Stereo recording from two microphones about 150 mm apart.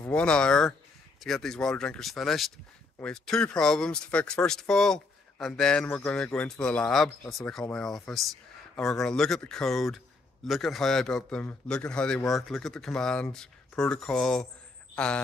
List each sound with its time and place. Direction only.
0.1 s speech: 5° left (ahead or behind)